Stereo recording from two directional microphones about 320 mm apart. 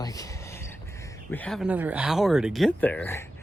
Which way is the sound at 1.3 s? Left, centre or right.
Centre.